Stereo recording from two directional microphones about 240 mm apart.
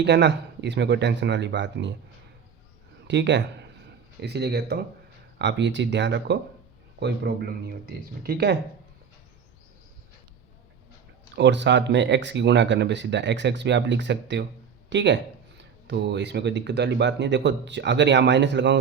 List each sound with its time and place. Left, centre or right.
0.0 s speech: right
3.1 s a man's voice: right
11.3 s speech: right